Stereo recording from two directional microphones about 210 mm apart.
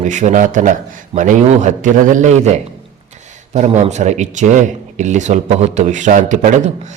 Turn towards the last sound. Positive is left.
turn(degrees=-35)  # may be behind; listen again after turning